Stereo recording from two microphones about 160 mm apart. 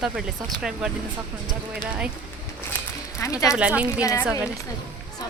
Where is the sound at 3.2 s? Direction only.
20° left (ahead or behind).